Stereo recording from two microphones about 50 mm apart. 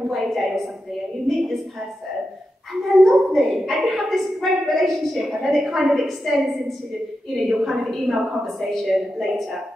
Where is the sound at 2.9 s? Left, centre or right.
Centre.